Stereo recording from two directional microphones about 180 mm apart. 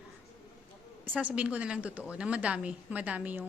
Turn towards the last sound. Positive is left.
turn(degrees=-10)  # may be behind; listen again after turning